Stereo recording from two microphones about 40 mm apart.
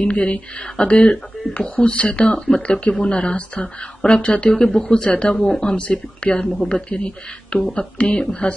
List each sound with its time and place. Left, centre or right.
0.0 s speech: left
3.3 s speech: left
4.6 s speech: centre